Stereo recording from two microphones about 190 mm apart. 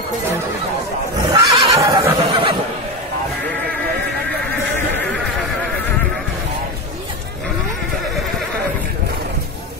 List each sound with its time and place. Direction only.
1.3 s neigh: 15° right (ahead or behind)